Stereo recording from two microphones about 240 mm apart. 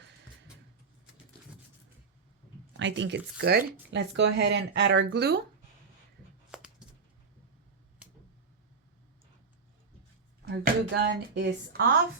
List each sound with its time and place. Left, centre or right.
2.7 s speech: right
6.5 s a sound: centre
10.4 s speech: right